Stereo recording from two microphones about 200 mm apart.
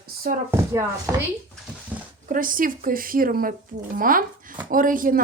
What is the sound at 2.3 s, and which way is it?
Speech, 45° right (ahead or behind).